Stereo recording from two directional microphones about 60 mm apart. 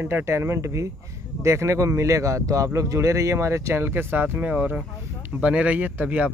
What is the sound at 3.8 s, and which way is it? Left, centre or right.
Speech, right.